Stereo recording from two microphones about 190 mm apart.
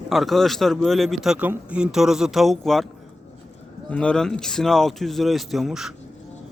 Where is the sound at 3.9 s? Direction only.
5° left (ahead or behind).